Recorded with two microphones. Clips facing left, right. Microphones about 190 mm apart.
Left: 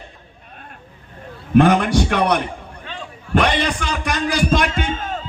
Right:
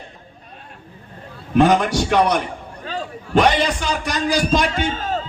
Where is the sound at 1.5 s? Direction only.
55° left (ahead or behind).